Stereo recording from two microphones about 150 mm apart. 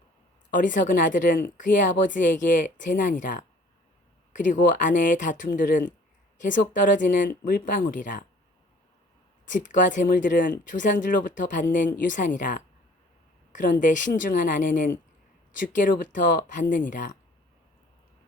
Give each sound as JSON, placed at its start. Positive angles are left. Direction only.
{"t": 0.5, "sound": "speech", "side_deg": 60}
{"t": 9.5, "sound": "speech", "side_deg": 60}